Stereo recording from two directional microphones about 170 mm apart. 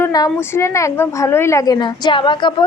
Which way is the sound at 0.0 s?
20° left (ahead or behind).